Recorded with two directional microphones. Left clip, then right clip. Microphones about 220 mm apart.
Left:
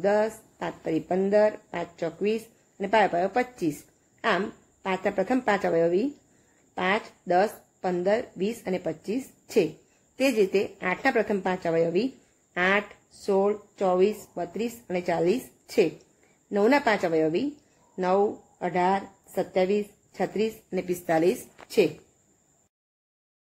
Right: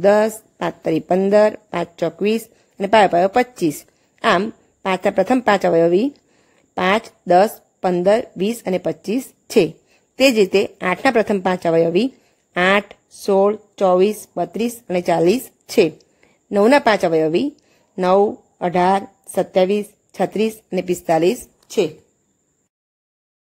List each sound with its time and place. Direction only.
0.0 s a woman's voice: 50° right (ahead or behind); by 21.9 s 30° right (ahead or behind)